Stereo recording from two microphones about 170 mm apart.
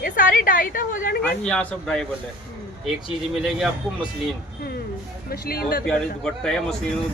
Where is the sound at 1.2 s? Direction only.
5° left (ahead or behind).